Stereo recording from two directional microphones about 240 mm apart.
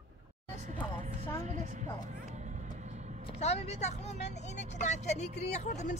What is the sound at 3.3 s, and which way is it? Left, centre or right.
A woman's voice, left.